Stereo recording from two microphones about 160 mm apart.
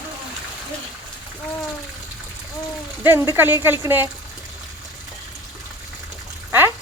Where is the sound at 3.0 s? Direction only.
15° right (ahead or behind).